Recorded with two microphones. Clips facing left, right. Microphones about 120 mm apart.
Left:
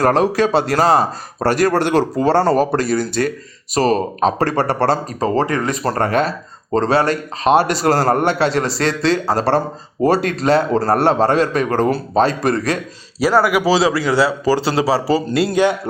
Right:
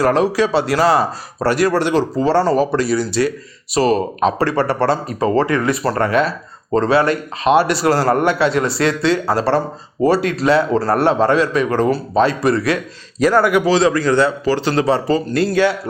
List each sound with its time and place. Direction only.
0.0 s a man's voice: 45° left (ahead or behind)
8.2 s a man's voice: 30° left (ahead or behind)
13.1 s speech: 5° left (ahead or behind)
15.3 s speech: 15° left (ahead or behind)